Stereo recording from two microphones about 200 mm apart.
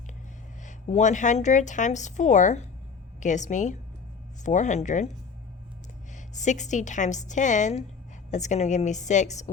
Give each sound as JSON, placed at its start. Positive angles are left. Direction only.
{"t": 0.6, "sound": "a woman's voice", "side_deg": 35}
{"t": 6.3, "sound": "a woman's voice", "side_deg": 35}